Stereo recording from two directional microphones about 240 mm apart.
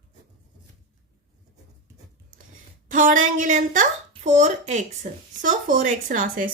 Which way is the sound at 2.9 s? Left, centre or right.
Right.